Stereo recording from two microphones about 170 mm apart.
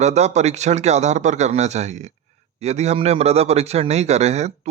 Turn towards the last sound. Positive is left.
turn(degrees=-40)  # may be behind; listen again after turning